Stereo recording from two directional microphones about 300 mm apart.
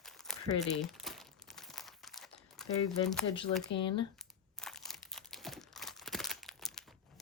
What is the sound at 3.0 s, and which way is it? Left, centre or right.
Speech, centre.